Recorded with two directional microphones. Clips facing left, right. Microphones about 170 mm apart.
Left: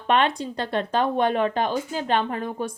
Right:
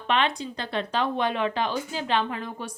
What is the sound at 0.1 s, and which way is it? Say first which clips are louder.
Speech: left 4 dB; 45° left (ahead or behind).